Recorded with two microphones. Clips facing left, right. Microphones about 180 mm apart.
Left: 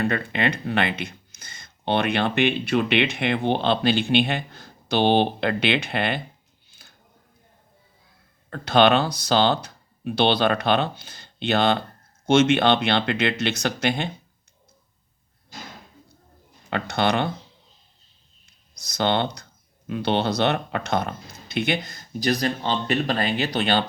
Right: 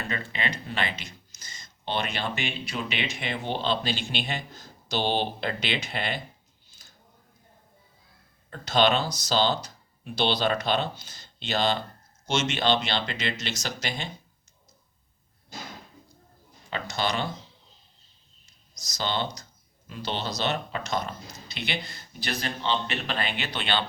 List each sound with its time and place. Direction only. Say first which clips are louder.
0.0 s speech: left 9 dB; 60° left (ahead or behind)
6.7 s a sound: left 4 dB; 60° left (ahead or behind)
8.4 s speech: left 5 dB; 60° left (ahead or behind)
16.6 s speech: left 6 dB; 60° left (ahead or behind)
18.4 s speech: even; 60° left (ahead or behind); by 23.8 s 40° left (ahead or behind)